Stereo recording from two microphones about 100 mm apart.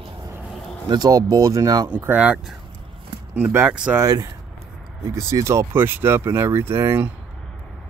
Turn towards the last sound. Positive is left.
turn(degrees=-20)  # may be behind; listen again after turning